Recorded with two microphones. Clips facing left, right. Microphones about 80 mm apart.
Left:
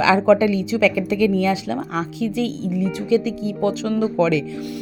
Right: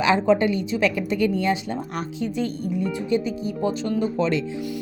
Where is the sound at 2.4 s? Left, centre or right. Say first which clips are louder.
Left 2 dB; left.